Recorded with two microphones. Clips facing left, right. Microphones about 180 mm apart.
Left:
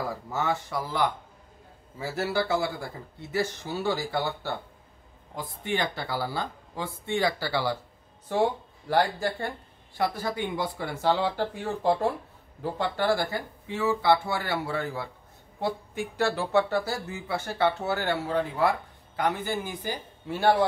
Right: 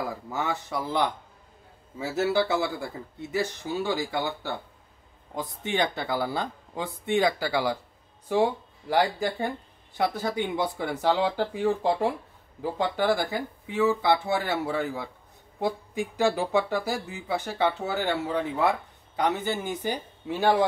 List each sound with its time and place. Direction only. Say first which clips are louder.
0.3 s speech: left 2 dB; 15° right (ahead or behind)